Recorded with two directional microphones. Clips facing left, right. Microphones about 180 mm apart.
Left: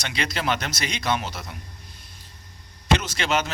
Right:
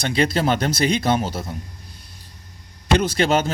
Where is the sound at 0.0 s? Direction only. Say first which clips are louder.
Right 8 dB; 35° right (ahead or behind).